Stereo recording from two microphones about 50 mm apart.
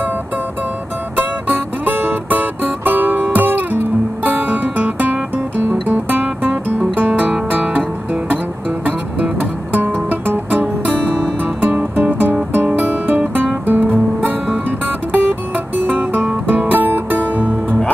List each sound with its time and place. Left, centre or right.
1.9 s music: right
6.2 s music: right
9.7 s music: right
11.9 s music: right